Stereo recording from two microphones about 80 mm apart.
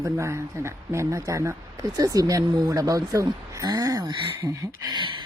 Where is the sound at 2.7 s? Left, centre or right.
Right.